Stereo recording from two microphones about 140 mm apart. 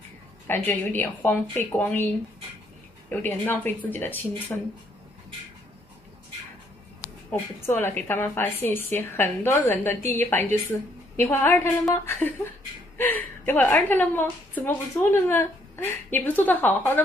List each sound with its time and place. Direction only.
0.5 s a woman's voice: 10° left (ahead or behind)
3.1 s a woman's voice: 15° left (ahead or behind)
7.2 s a woman's voice: 15° left (ahead or behind)